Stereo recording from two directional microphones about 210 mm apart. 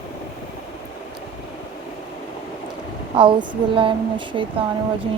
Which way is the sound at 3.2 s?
25° right (ahead or behind).